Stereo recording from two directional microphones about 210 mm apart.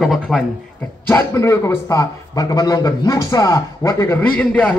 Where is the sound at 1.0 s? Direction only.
15° left (ahead or behind).